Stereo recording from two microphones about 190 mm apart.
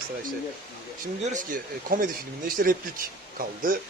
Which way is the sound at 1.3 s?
45° right (ahead or behind).